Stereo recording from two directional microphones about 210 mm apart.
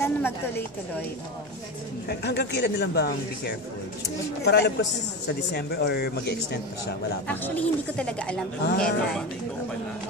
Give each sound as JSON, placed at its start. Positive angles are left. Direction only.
{"t": 0.0, "sound": "speech", "side_deg": 10}
{"t": 2.0, "sound": "speech", "side_deg": 50}
{"t": 7.2, "sound": "speech", "side_deg": 5}
{"t": 8.6, "sound": "speech", "side_deg": 45}